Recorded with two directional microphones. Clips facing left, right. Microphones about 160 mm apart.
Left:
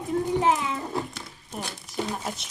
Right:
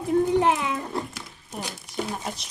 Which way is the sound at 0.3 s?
65° right (ahead or behind).